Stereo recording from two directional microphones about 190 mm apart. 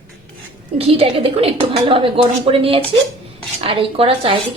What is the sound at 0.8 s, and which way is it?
A woman's voice, 30° right (ahead or behind).